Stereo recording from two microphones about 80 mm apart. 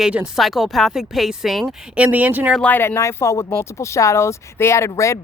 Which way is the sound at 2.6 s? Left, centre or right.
Centre.